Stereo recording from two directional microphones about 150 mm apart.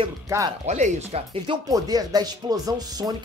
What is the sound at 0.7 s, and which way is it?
Speech, 50° right (ahead or behind).